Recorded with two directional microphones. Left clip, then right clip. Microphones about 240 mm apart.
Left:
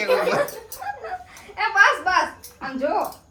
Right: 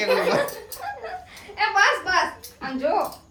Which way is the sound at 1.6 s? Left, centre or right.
Left.